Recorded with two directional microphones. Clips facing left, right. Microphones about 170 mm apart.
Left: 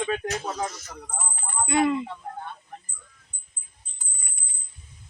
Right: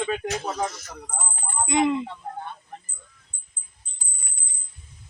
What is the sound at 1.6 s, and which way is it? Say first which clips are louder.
Speech: right 1 dB; 15° right (ahead or behind).